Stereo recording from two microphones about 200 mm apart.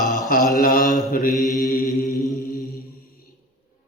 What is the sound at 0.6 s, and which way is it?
Mantra, 45° left (ahead or behind).